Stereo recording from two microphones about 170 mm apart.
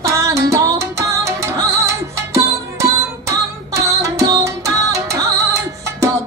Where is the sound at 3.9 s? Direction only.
20° right (ahead or behind).